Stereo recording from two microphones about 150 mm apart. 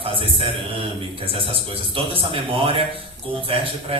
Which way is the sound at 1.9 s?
35° right (ahead or behind).